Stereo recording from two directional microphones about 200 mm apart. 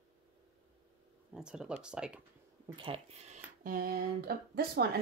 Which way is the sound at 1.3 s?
5° right (ahead or behind).